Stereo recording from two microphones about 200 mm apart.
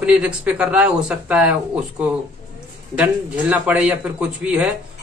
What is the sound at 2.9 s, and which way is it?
A man's voice, 5° right (ahead or behind).